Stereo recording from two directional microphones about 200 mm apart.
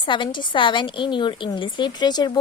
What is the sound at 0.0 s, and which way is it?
A woman's voice, 25° left (ahead or behind).